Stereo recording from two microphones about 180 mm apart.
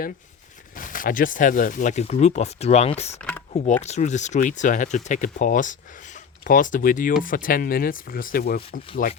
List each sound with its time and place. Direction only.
0.8 s speech: 50° left (ahead or behind)
3.2 s a sound: 5° left (ahead or behind)
3.8 s speech: 40° left (ahead or behind)